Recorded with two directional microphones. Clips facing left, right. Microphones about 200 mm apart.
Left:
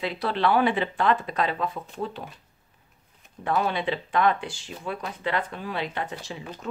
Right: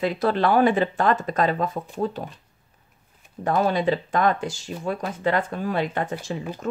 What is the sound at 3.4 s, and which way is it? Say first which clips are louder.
A woman's voice: right 5 dB; 40° right (ahead or behind).